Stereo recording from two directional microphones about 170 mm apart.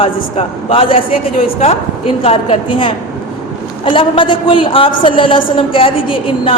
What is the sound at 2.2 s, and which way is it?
A woman's voice, 30° left (ahead or behind).